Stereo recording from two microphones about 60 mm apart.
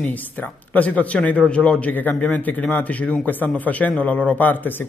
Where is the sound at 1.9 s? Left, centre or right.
Left.